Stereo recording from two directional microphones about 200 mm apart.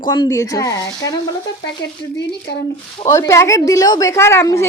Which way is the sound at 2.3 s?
55° left (ahead or behind).